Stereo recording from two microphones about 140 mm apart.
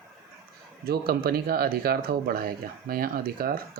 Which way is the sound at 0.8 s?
90° right.